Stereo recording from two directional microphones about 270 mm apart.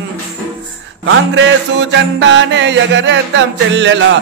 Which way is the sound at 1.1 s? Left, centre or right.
Right.